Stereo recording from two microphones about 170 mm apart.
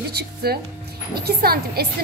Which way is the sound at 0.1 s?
70° right (ahead or behind).